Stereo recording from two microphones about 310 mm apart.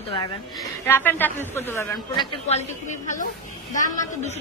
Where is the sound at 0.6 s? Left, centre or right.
Centre.